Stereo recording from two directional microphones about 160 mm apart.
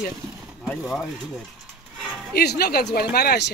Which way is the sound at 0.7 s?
5° left (ahead or behind).